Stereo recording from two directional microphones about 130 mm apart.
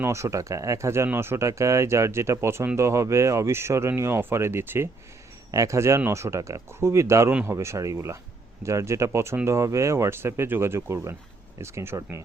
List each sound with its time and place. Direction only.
0.0 s speech: 20° right (ahead or behind)